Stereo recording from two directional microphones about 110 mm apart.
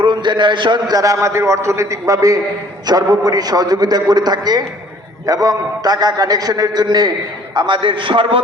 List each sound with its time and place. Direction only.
0.0 s a man's voice: 45° right (ahead or behind)